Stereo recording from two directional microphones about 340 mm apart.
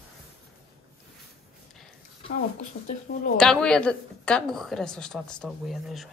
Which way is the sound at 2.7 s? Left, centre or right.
Left.